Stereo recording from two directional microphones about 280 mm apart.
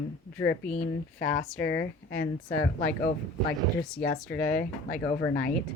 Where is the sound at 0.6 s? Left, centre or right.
Left.